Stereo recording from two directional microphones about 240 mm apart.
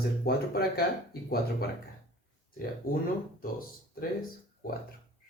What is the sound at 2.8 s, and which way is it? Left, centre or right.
Speech, left.